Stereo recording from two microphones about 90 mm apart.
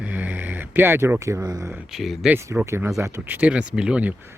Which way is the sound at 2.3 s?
25° right (ahead or behind).